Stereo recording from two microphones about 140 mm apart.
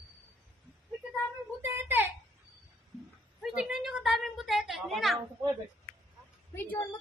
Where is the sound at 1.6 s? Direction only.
15° right (ahead or behind).